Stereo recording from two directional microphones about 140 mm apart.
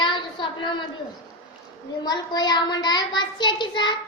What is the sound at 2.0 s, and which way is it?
Child singing, 30° left (ahead or behind).